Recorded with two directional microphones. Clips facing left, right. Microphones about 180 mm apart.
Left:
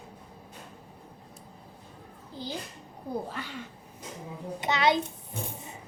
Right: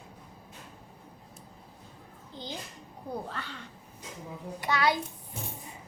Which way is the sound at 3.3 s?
10° left (ahead or behind).